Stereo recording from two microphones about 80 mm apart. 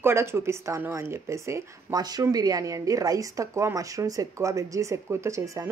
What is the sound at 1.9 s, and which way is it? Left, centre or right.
A woman's voice, right.